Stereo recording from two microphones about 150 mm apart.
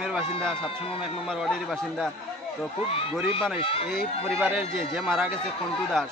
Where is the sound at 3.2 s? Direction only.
40° left (ahead or behind).